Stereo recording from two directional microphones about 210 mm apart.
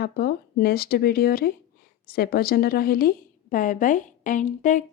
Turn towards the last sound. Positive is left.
turn(degrees=35)  # may be behind; listen again after turning